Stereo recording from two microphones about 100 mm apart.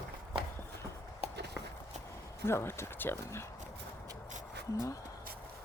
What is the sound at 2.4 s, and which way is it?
Speech, 25° left (ahead or behind).